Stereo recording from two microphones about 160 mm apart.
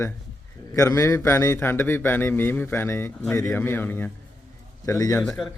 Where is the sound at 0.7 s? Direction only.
20° left (ahead or behind).